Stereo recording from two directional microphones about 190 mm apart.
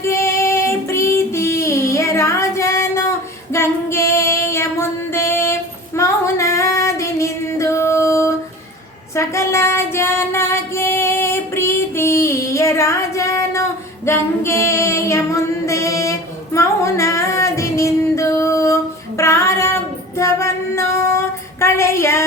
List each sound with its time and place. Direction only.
0.0 s child singing: 15° left (ahead or behind)
3.5 s female singing: 15° left (ahead or behind)
9.1 s child singing: 15° left (ahead or behind)
20.1 s music: 15° left (ahead or behind)
21.6 s a sound: 15° left (ahead or behind)